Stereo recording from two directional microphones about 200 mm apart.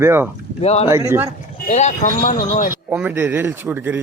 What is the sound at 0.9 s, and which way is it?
Speech, 15° right (ahead or behind).